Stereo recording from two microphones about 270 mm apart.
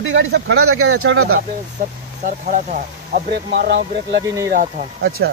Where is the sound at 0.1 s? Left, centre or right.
Right.